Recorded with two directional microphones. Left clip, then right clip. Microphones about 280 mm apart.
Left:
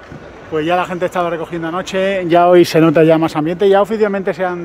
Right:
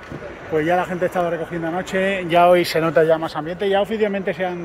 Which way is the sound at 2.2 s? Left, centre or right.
Left.